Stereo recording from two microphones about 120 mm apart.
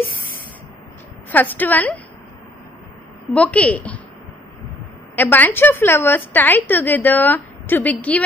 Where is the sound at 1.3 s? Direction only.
15° left (ahead or behind).